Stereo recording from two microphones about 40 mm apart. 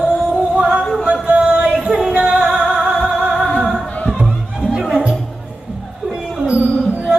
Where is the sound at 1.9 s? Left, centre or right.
Centre.